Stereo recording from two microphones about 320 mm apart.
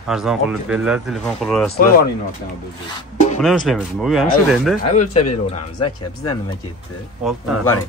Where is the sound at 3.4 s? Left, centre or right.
Centre.